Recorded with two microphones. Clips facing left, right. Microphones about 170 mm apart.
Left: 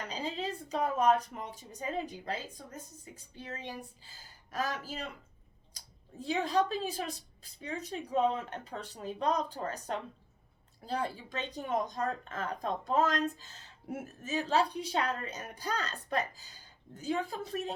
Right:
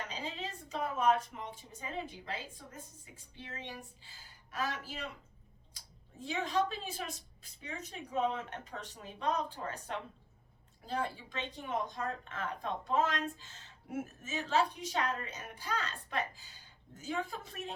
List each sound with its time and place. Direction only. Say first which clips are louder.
0.1 s speech: left 5 dB; 35° left (ahead or behind)